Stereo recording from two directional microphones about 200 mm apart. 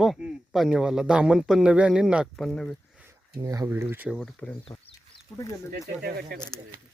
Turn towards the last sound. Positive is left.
turn(degrees=5)  # may be behind; listen again after turning